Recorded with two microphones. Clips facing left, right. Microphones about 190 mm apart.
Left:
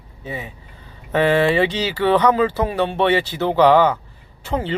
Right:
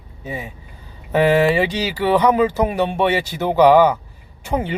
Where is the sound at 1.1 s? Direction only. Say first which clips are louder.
Right 1 dB; 10° right (ahead or behind).